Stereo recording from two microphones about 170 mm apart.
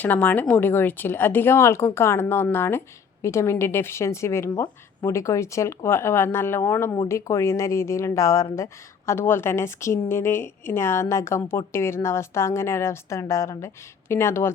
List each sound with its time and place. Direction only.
0.0 s speech: 10° left (ahead or behind)